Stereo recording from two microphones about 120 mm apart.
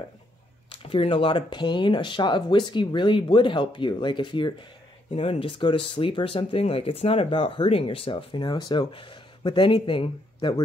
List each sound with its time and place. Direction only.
0.7 s speech: 50° left (ahead or behind)